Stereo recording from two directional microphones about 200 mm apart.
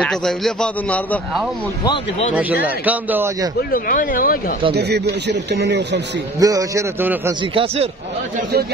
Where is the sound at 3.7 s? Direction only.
45° left (ahead or behind).